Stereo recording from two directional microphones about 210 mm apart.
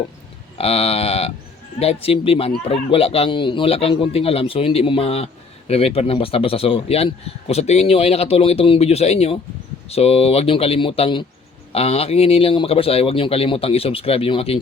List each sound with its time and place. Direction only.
0.6 s speech: 30° left (ahead or behind)